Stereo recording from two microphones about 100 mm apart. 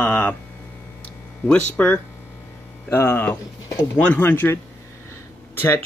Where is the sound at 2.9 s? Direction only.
25° left (ahead or behind).